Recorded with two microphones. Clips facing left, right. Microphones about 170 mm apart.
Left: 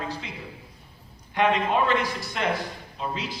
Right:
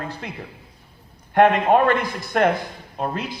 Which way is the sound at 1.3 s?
55° right (ahead or behind).